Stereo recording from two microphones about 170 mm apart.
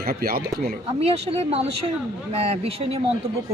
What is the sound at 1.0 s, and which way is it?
A woman's voice, 35° right (ahead or behind).